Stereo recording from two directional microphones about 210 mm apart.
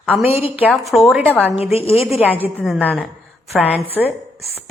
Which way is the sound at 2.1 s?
5° right (ahead or behind).